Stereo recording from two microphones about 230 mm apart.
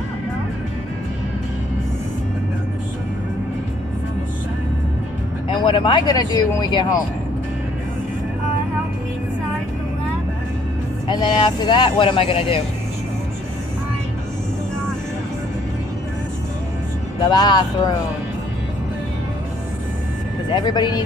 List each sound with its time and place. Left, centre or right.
5.5 s speech: left
11.1 s speech: centre
17.3 s speech: centre
20.4 s speech: centre